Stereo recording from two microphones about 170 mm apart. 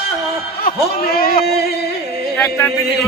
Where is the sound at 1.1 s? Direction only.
60° left (ahead or behind).